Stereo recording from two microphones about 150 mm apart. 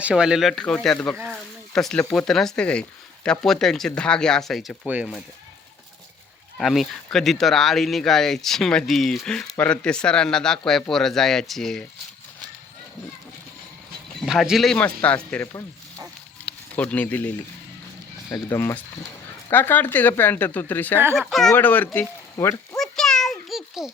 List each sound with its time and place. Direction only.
0.0 s speech: 5° right (ahead or behind)
4.9 s speech: 10° right (ahead or behind)
6.6 s speech: centre (ahead or behind)
14.3 s speech: centre (ahead or behind)
16.5 s speech: 10° left (ahead or behind)
21.2 s speech: centre (ahead or behind); by 22.8 s 20° left (ahead or behind)
22.8 s a sound: 5° left (ahead or behind)